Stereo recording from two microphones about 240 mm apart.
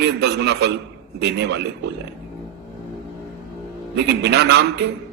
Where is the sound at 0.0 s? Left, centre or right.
Right.